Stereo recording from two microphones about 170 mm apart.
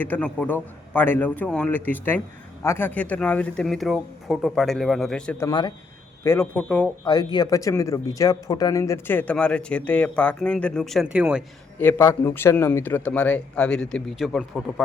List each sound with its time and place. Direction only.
0.0 s speech: 10° left (ahead or behind)
5.5 s speech: 25° left (ahead or behind); by 6.9 s 5° left (ahead or behind)
7.0 s speech: 25° left (ahead or behind); by 11.4 s 5° right (ahead or behind)
11.8 s speech: 10° left (ahead or behind)